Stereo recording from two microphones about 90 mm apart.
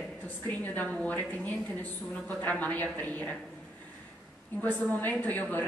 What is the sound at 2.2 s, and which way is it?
Speech, 20° left (ahead or behind).